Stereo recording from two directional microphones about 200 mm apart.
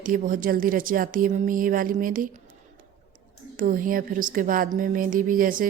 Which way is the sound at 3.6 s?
45° right (ahead or behind).